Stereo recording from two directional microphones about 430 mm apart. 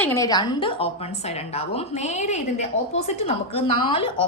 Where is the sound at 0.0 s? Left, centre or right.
Centre.